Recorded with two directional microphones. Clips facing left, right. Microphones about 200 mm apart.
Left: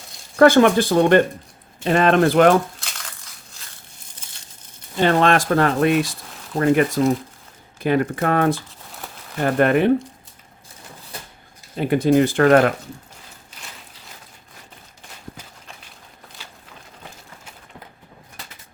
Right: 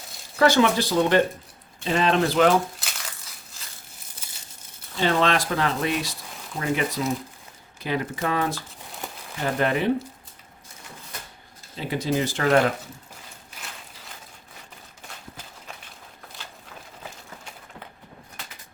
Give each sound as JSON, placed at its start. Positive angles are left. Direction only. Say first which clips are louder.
{"t": 0.3, "sound": "speech", "louder": "left 6 dB", "side_deg": 55}
{"t": 4.1, "sound": "crumpling", "louder": "even", "side_deg": -5}
{"t": 4.9, "sound": "speech", "louder": "left 5 dB", "side_deg": 55}
{"t": 11.8, "sound": "speech", "louder": "left 9 dB", "side_deg": 55}